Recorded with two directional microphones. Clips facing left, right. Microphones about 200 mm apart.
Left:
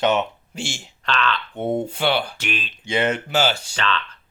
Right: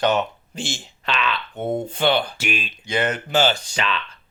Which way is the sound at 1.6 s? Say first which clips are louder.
Even; 10° left (ahead or behind).